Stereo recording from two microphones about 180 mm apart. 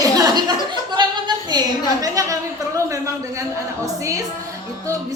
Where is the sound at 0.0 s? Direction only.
20° right (ahead or behind).